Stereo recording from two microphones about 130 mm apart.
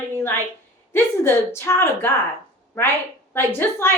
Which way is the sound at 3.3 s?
20° left (ahead or behind).